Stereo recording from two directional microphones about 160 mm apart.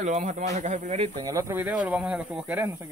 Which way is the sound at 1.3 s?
20° right (ahead or behind).